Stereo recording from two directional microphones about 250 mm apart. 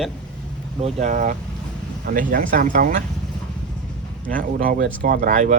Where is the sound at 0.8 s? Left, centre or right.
Right.